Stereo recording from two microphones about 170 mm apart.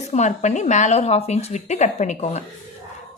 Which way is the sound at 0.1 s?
45° left (ahead or behind).